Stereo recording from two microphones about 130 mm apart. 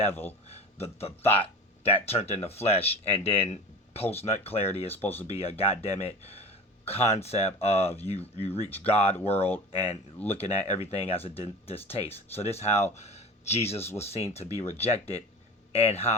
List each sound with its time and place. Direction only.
0.1 s speech: 15° left (ahead or behind)
0.4 s speech: 50° left (ahead or behind)